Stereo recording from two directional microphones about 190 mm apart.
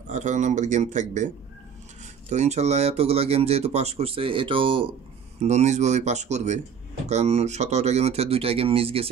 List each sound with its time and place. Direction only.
0.1 s speech: 40° right (ahead or behind)